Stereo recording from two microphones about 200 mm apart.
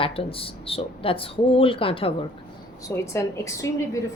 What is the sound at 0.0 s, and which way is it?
Speech, 30° left (ahead or behind).